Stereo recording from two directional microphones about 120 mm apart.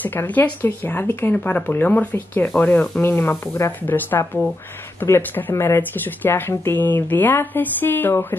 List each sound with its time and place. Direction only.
0.0 s speech: 15° left (ahead or behind)